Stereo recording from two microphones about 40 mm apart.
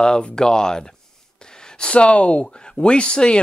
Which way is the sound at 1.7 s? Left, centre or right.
Left.